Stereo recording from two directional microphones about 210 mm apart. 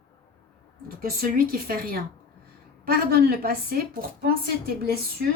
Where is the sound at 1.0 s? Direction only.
45° right (ahead or behind).